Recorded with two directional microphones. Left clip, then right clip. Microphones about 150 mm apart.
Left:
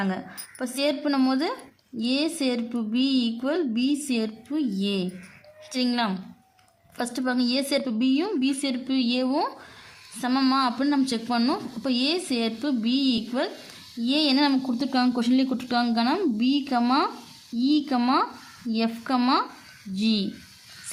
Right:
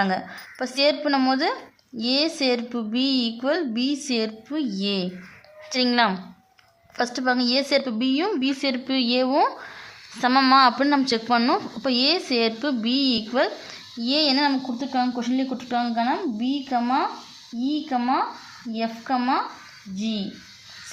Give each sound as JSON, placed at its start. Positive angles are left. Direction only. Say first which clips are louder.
{"t": 0.0, "sound": "a woman's voice", "louder": "right 7 dB", "side_deg": 10}
{"t": 14.8, "sound": "speech", "louder": "even", "side_deg": 45}